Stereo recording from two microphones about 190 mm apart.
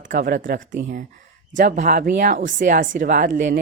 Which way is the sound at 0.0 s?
45° right (ahead or behind).